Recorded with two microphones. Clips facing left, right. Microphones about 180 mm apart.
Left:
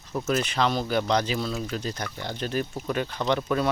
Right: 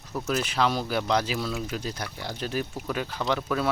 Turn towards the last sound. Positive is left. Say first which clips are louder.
# left 2 dB
turn(degrees=0)  # may be behind; listen again after turning